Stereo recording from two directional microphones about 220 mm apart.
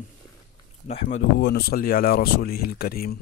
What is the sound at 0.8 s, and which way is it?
Speech, 30° left (ahead or behind).